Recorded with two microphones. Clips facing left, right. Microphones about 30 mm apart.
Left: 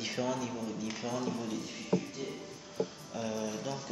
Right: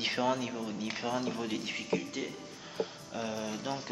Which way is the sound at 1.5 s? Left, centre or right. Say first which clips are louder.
Even; right.